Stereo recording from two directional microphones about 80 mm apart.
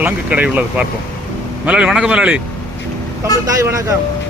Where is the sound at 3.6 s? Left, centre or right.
Right.